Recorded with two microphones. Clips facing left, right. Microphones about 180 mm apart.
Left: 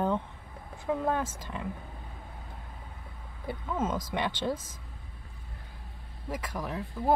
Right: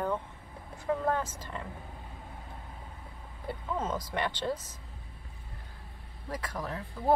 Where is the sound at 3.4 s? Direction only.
15° left (ahead or behind).